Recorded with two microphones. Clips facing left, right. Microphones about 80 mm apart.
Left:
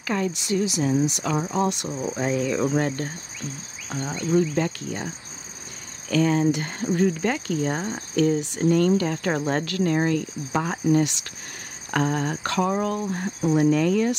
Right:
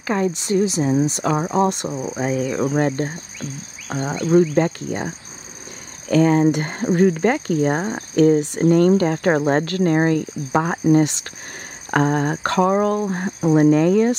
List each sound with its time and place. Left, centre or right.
0.0 s speech: right
1.9 s speech: centre
3.9 s speech: right
6.0 s speech: right